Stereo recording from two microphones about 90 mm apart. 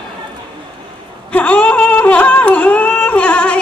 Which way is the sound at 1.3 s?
15° left (ahead or behind).